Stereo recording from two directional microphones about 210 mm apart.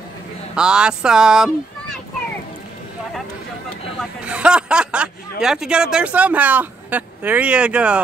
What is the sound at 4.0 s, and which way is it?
Speech, 5° right (ahead or behind).